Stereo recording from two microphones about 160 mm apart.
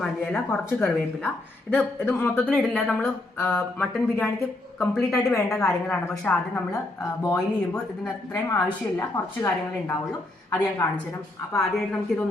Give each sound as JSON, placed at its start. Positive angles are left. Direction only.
{"t": 0.0, "sound": "a woman's voice", "side_deg": 5}